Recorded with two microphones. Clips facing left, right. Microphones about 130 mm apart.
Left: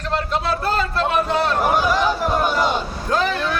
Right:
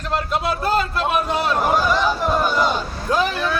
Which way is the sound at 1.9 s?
15° left (ahead or behind).